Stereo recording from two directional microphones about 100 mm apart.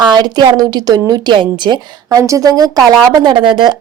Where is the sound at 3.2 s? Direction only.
50° right (ahead or behind).